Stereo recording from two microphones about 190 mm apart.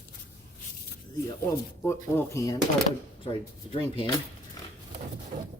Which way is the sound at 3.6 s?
30° left (ahead or behind).